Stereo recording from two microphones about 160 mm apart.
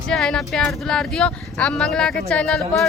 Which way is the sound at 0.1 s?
5° left (ahead or behind).